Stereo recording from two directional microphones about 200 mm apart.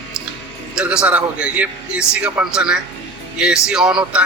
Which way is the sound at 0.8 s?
5° right (ahead or behind).